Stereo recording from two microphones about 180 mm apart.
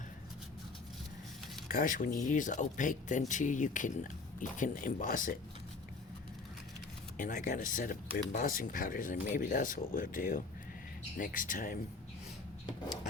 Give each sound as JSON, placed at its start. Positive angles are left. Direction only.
{"t": 1.6, "sound": "speech", "side_deg": 50}
{"t": 7.2, "sound": "speech", "side_deg": 45}